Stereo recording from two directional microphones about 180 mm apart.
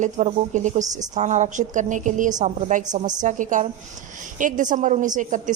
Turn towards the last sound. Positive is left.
turn(degrees=-45)  # may be behind; listen again after turning